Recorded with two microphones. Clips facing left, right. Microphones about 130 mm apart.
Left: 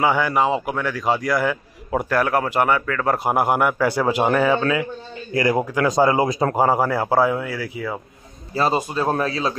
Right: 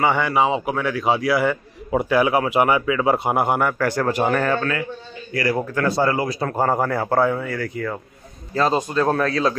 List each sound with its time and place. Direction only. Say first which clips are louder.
0.0 s a man's voice: even; centre (ahead or behind)
3.3 s a man's voice: left 1 dB; 5° left (ahead or behind); by 6.6 s 20° left (ahead or behind)
6.6 s a man's voice: even; 5° left (ahead or behind)